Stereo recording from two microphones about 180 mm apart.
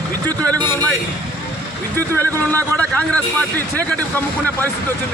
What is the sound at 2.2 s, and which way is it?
A man's voice, 10° left (ahead or behind).